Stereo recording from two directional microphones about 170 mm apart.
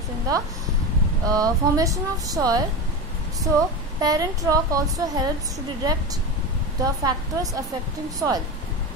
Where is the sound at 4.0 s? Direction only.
20° right (ahead or behind).